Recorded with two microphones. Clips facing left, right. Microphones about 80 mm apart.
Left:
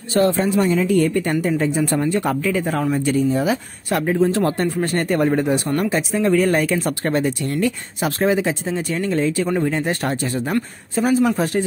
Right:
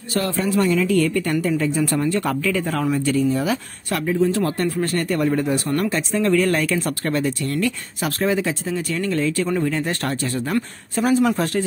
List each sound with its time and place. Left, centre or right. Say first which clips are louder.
0.1 s speech: left 4 dB; left
4.0 s speech: left 1 dB; left
4.6 s speech: left 1 dB; centre
4.9 s speech: left 4 dB; left
5.8 s speech: left 1 dB; centre
11.0 s speech: left 1 dB; centre